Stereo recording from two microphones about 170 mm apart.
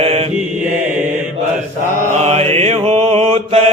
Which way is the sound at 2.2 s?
40° right (ahead or behind).